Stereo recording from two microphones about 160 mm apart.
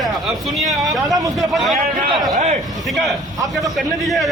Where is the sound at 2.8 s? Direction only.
Centre (ahead or behind).